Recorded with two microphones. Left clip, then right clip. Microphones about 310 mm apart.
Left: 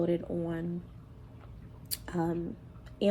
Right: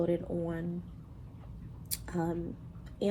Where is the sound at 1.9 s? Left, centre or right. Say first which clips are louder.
Left 2 dB; left.